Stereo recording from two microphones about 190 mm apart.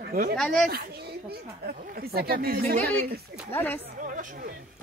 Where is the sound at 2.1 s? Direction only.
55° right (ahead or behind).